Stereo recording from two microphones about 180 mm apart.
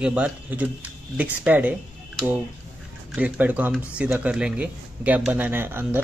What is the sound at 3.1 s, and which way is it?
Speech, 10° right (ahead or behind).